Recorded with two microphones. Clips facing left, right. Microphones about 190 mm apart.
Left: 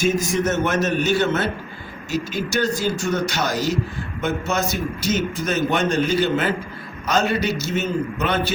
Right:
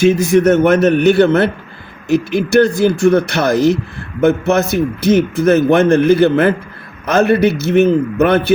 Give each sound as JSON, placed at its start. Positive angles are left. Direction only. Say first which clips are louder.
{"t": 0.0, "sound": "a man's voice", "louder": "right 10 dB", "side_deg": -65}